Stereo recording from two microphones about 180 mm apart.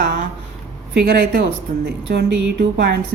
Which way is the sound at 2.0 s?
70° right (ahead or behind).